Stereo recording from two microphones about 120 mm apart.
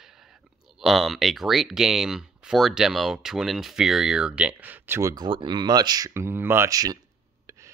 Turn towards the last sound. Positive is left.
turn(degrees=-30)  # may be behind; listen again after turning